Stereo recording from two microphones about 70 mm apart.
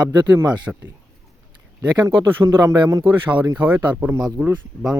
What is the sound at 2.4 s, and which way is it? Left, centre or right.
Speech, right.